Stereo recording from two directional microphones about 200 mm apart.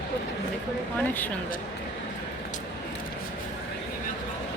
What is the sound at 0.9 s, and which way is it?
Speech, 10° left (ahead or behind).